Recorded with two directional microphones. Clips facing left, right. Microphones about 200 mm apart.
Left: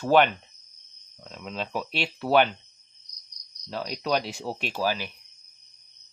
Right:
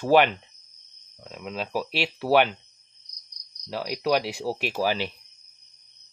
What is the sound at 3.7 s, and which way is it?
Speech, 10° right (ahead or behind).